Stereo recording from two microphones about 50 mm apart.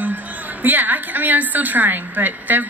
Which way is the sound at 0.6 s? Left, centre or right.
Right.